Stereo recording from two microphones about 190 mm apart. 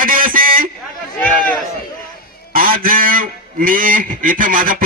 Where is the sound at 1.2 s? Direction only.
10° left (ahead or behind).